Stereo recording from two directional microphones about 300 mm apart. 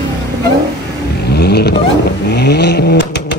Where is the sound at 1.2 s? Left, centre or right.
Left.